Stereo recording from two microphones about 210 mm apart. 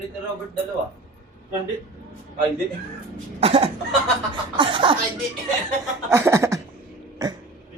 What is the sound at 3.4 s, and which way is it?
Speech, 30° right (ahead or behind).